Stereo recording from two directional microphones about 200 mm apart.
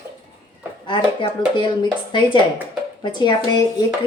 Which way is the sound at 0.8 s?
25° left (ahead or behind).